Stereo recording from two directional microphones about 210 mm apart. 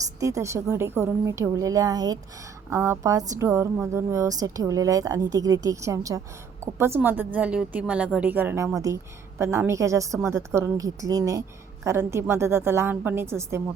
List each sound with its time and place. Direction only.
0.2 s a woman's voice: 15° right (ahead or behind)